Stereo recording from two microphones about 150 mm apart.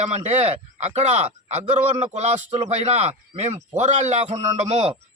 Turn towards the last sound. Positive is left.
turn(degrees=-45)  # may be behind; listen again after turning